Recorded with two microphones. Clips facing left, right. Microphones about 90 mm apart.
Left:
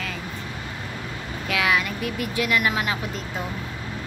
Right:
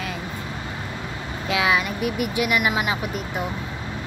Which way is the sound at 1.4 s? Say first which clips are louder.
Right 2 dB; 20° right (ahead or behind).